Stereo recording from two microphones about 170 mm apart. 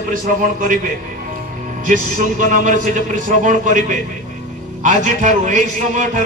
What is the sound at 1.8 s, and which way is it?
A man's voice, 50° right (ahead or behind).